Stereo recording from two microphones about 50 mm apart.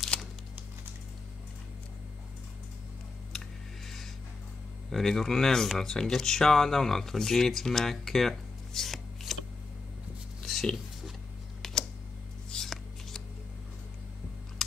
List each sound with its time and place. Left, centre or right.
0.1 s crumpling: left
4.8 s speech: centre
10.4 s a sound: centre